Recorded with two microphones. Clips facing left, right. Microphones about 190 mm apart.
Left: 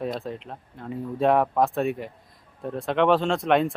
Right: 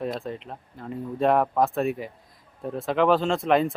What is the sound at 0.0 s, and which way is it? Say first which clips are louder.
Speech: even; centre (ahead or behind).